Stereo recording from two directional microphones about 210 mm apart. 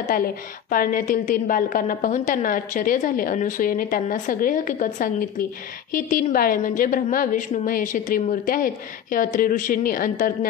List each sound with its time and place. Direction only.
0.1 s a woman's voice: 40° left (ahead or behind)